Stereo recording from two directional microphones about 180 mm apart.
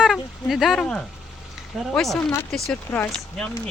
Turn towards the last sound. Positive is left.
turn(degrees=5)  # may be behind; listen again after turning